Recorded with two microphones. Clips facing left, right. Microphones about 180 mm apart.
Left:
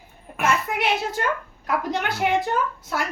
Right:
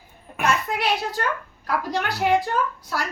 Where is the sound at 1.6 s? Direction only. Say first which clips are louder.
Even; 20° left (ahead or behind).